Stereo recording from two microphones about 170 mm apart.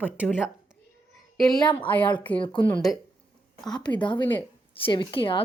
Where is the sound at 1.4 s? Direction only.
Centre (ahead or behind).